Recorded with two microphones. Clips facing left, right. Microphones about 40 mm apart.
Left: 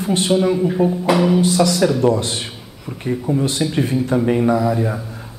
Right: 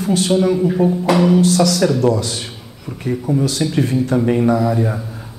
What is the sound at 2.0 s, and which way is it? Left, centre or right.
Speech, left.